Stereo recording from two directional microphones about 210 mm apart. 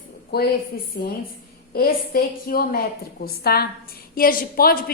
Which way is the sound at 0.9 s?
50° left (ahead or behind).